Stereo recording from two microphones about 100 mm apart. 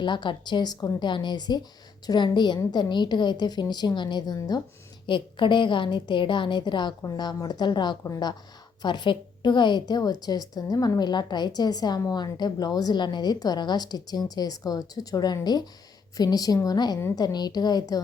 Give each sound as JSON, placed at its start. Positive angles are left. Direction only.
{"t": 0.0, "sound": "a woman's voice", "side_deg": 50}
{"t": 5.0, "sound": "a woman's voice", "side_deg": 55}
{"t": 8.0, "sound": "a woman's voice", "side_deg": 35}
{"t": 8.8, "sound": "a woman's voice", "side_deg": 50}